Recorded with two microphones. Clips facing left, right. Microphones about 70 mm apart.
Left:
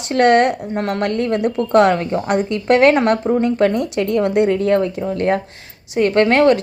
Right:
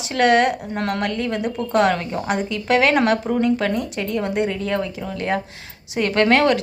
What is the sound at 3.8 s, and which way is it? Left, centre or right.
Speech, left.